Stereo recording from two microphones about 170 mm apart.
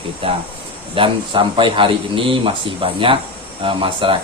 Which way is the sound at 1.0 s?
30° right (ahead or behind).